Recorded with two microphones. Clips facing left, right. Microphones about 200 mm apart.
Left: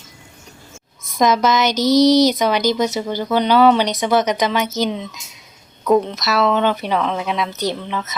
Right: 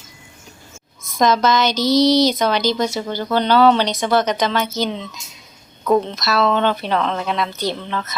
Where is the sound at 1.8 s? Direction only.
40° left (ahead or behind).